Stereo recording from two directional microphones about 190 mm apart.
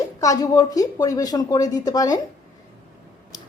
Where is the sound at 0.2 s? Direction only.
20° left (ahead or behind).